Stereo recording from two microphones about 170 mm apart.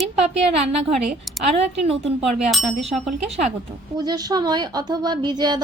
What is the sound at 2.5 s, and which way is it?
Speech, centre (ahead or behind).